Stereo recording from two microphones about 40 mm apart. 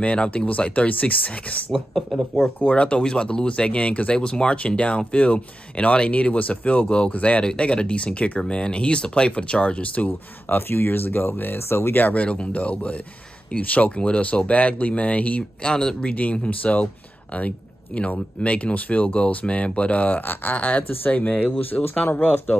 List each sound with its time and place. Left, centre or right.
0.0 s speech: left
2.1 s speech: centre
2.6 s speech: left
10.5 s speech: left
12.0 s speech: left
15.6 s speech: centre; by 19.1 s left
19.1 s speech: left